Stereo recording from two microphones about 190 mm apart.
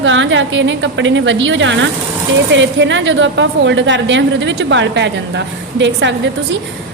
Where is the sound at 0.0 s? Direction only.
75° right (ahead or behind).